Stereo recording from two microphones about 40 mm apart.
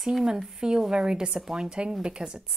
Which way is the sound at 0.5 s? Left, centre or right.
Centre.